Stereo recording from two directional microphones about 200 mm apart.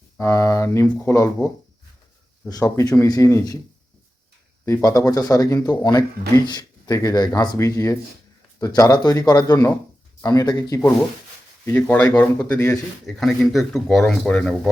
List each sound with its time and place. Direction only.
0.2 s speech: 15° left (ahead or behind)
2.5 s speech: 15° left (ahead or behind)
4.6 s speech: 15° left (ahead or behind)
11.6 s speech: 10° left (ahead or behind)